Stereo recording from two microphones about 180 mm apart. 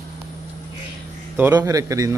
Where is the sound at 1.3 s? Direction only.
15° right (ahead or behind).